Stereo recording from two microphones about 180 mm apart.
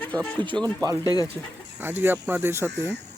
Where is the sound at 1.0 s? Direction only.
20° left (ahead or behind).